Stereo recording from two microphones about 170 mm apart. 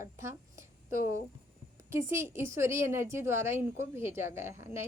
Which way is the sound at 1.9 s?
15° right (ahead or behind).